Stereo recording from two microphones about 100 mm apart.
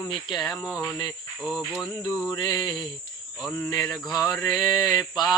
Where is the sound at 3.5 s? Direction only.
25° left (ahead or behind).